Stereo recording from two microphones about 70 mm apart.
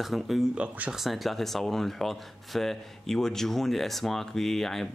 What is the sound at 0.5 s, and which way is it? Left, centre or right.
Speech, centre.